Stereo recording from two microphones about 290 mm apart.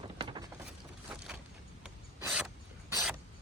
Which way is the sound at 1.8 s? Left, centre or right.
Centre.